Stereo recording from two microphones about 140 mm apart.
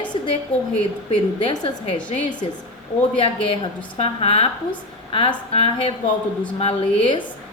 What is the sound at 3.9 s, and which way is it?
Speech, 45° left (ahead or behind).